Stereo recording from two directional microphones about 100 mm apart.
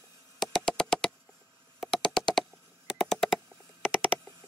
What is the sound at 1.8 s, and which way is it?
Computer keyboard, centre (ahead or behind).